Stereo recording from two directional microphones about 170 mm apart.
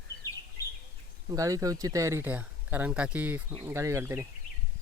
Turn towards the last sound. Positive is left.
turn(degrees=-15)  # may be behind; listen again after turning